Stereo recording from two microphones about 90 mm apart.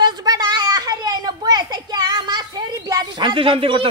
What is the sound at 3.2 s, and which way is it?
Speech, 70° right (ahead or behind).